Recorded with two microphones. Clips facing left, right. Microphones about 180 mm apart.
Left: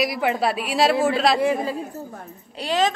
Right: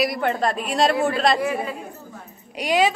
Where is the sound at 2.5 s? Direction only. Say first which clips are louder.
Right 2 dB; 15° right (ahead or behind).